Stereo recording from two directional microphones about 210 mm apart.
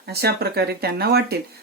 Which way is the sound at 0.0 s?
50° right (ahead or behind).